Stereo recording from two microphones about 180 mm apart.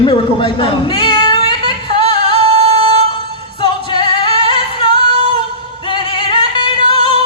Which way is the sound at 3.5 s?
25° left (ahead or behind).